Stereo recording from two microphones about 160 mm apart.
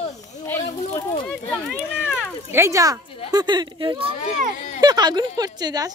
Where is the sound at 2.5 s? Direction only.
15° right (ahead or behind).